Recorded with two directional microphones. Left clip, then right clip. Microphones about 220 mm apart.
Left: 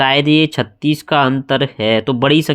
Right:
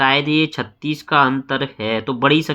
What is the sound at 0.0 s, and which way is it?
Speech, 30° left (ahead or behind).